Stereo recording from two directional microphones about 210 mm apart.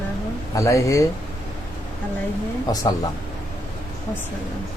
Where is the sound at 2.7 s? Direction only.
15° left (ahead or behind).